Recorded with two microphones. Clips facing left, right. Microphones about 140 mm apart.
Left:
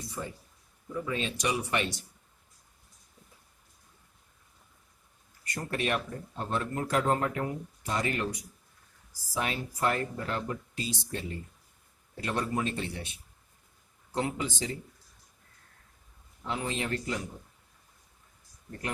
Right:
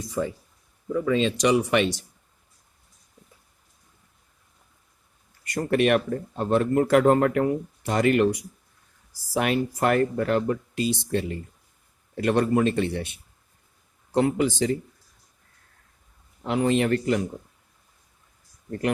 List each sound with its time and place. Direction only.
0.2 s speech: 90° right
5.5 s speech: 80° right
12.1 s a man's voice: 65° right (ahead or behind)
14.1 s speech: 75° right (ahead or behind)
16.4 s speech: 75° right (ahead or behind)